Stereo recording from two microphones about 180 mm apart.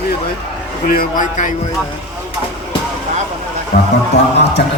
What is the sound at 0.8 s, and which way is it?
Speech, 50° left (ahead or behind).